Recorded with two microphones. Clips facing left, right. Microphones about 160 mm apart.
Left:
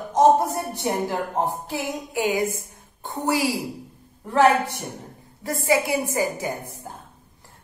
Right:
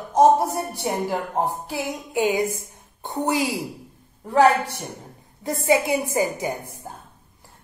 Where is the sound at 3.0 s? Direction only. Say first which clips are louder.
Even; 20° right (ahead or behind).